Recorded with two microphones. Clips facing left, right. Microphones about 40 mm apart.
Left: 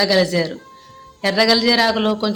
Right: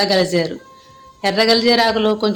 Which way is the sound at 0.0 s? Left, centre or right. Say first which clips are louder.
Even; centre.